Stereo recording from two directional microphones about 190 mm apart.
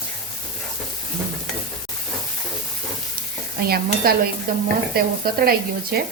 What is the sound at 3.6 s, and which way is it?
Stir, 55° right (ahead or behind).